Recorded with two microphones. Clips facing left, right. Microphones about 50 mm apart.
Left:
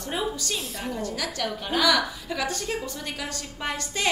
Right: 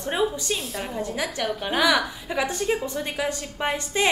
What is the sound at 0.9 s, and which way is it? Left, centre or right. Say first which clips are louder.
A woman's voice: right 2 dB; right.